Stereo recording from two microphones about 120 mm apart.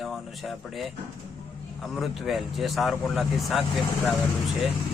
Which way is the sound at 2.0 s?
Centre (ahead or behind).